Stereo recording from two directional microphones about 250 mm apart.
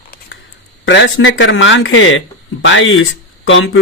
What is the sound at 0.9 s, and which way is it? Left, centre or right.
Speech, left.